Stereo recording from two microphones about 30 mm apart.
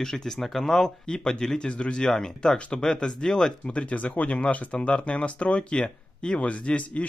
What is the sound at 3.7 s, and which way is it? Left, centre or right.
Speech, left.